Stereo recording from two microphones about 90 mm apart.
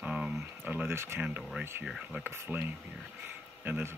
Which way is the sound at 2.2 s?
25° right (ahead or behind).